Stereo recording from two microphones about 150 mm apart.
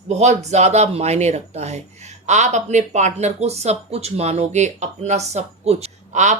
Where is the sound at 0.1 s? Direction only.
50° right (ahead or behind).